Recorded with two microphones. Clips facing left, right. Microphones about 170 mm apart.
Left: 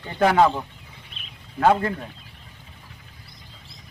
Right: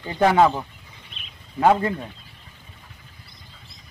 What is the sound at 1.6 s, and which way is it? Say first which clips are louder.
Speech: right 1 dB; 10° right (ahead or behind).